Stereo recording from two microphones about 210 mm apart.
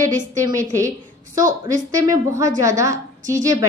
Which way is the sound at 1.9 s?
15° right (ahead or behind).